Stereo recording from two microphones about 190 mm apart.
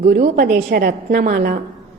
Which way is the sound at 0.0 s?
45° right (ahead or behind).